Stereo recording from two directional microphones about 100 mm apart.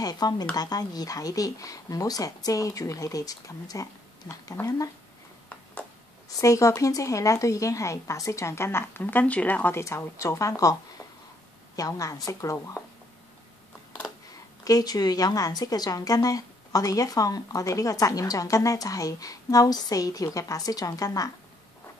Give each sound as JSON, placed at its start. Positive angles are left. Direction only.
{"t": 0.0, "sound": "a woman's voice", "side_deg": 40}
{"t": 6.4, "sound": "a woman's voice", "side_deg": 35}
{"t": 14.6, "sound": "a woman's voice", "side_deg": 40}